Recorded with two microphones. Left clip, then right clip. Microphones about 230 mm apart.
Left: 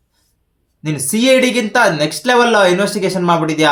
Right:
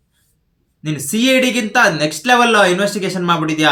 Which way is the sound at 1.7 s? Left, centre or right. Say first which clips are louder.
Right 1 dB; centre.